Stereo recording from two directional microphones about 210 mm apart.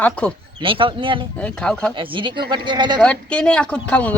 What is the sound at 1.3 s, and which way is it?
Speech, 5° left (ahead or behind).